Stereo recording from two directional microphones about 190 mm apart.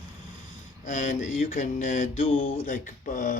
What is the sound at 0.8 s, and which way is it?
Speech, 40° left (ahead or behind).